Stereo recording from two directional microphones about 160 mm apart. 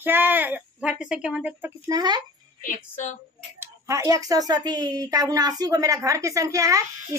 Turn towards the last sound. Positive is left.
turn(degrees=-20)  # may be behind; listen again after turning